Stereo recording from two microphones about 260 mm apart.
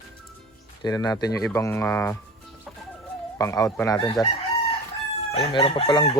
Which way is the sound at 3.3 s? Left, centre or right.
Centre.